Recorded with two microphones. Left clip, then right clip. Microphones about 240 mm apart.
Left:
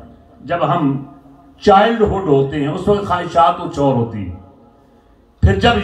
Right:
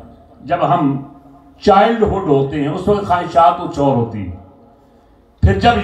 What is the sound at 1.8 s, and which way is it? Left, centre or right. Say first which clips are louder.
A man's voice: right 1 dB; centre.